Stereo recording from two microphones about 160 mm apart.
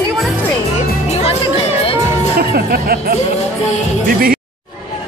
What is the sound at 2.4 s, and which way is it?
Speech, 70° right (ahead or behind).